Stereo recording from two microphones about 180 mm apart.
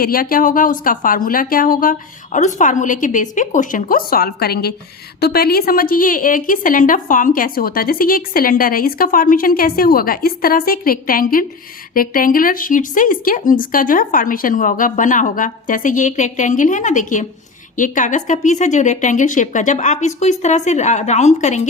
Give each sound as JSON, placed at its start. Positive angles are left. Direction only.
{"t": 0.0, "sound": "a woman's voice", "side_deg": 55}